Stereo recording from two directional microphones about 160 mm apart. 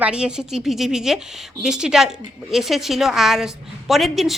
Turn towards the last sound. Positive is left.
turn(degrees=0)  # may be behind; listen again after turning